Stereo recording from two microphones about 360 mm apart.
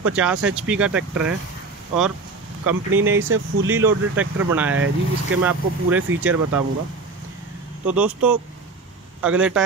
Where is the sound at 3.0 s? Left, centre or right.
Right.